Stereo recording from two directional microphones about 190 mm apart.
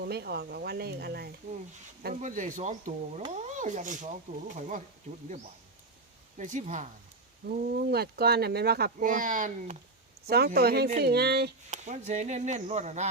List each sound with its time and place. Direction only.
0.0 s speech: 55° right (ahead or behind)
2.0 s speech: 45° right (ahead or behind)
6.3 s speech: 40° right (ahead or behind)
7.4 s speech: 60° right (ahead or behind)
10.2 s speech: 55° right (ahead or behind)
11.7 s speech: 40° right (ahead or behind)